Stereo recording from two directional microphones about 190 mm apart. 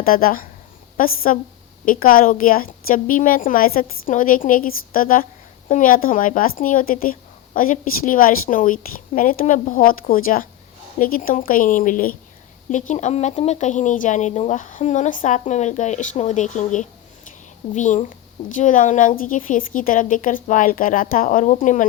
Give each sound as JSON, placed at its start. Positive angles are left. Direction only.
{"t": 0.0, "sound": "speech", "side_deg": 50}